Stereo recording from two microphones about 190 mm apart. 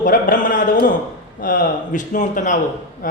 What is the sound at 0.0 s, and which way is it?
Speech, 45° left (ahead or behind).